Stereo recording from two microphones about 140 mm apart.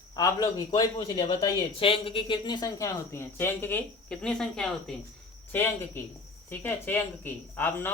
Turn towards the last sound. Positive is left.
turn(degrees=15)  # may be behind; listen again after turning